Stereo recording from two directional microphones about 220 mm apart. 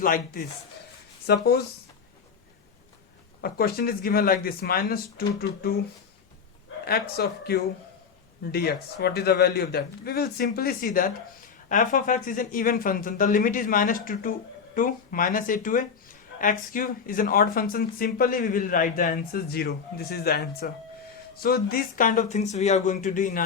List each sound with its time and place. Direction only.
0.0 s a man's voice: 40° left (ahead or behind)
3.4 s a man's voice: 45° left (ahead or behind)
6.8 s a man's voice: 45° left (ahead or behind)